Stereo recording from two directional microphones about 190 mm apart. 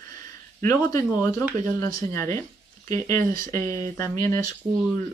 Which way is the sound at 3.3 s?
45° right (ahead or behind).